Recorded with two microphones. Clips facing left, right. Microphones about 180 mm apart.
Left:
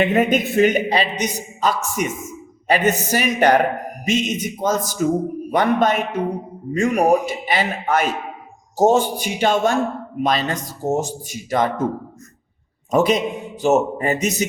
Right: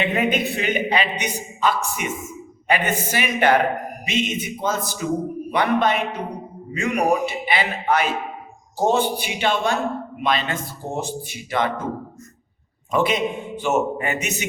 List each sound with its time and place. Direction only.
0.0 s a woman's voice: 45° left (ahead or behind)
12.9 s a man's voice: 40° left (ahead or behind)